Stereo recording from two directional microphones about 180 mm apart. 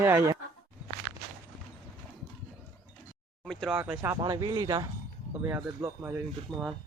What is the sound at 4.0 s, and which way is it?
Speech, 20° right (ahead or behind).